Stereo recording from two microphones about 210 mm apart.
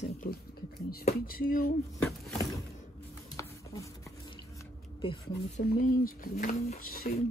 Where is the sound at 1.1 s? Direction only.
45° left (ahead or behind).